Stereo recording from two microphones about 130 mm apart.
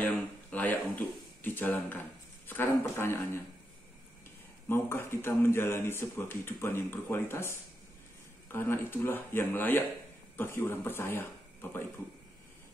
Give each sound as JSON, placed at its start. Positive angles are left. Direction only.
{"t": 0.5, "sound": "speech", "side_deg": 10}
{"t": 4.6, "sound": "speech", "side_deg": 20}